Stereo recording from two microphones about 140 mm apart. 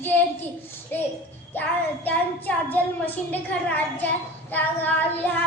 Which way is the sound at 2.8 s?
10° left (ahead or behind).